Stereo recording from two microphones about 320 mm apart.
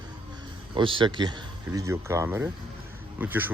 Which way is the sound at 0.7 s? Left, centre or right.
Centre.